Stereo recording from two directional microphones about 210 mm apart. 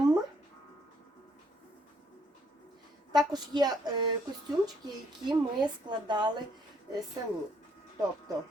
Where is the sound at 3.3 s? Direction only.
20° right (ahead or behind).